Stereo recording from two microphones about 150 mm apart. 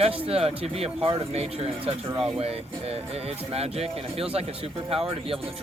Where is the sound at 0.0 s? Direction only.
40° right (ahead or behind).